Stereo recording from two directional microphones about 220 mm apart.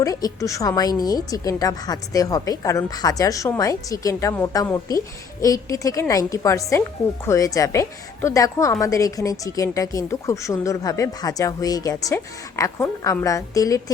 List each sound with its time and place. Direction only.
0.0 s a woman's voice: 15° left (ahead or behind)